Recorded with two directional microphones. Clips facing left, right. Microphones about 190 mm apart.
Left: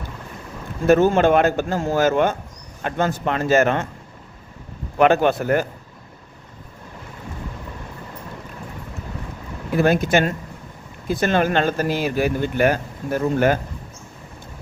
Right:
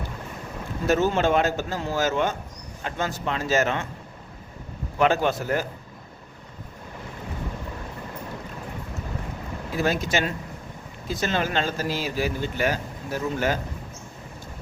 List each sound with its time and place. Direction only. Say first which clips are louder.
0.9 s speech: left 7 dB; 55° left (ahead or behind)
4.9 s speech: left 6 dB; 60° left (ahead or behind)
9.7 s speech: left 7 dB; 55° left (ahead or behind)